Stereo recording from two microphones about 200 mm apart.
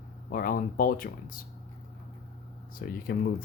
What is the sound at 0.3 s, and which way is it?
Speech, 45° left (ahead or behind).